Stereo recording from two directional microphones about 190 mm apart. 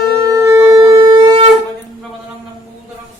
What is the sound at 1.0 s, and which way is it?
Wind instrument, 25° right (ahead or behind).